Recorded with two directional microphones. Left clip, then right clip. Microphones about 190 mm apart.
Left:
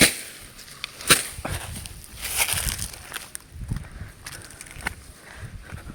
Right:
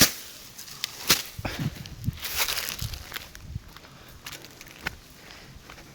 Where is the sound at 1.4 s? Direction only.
25° right (ahead or behind).